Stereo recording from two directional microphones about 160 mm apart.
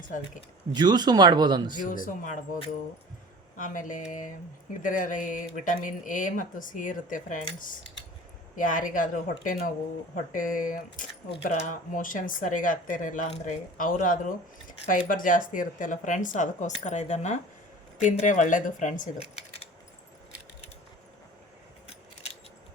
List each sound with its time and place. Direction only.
0.7 s speech: 25° right (ahead or behind)
1.7 s speech: 55° left (ahead or behind)
3.6 s speech: 55° left (ahead or behind)